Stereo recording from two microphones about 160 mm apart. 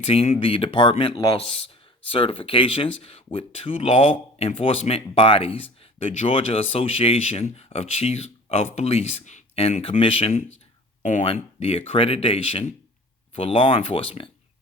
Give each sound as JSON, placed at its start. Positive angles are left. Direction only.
{"t": 0.0, "sound": "speech", "side_deg": 35}
{"t": 11.0, "sound": "speech", "side_deg": 50}
{"t": 11.3, "sound": "speech", "side_deg": 35}